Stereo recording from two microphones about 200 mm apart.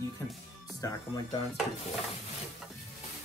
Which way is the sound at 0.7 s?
20° left (ahead or behind).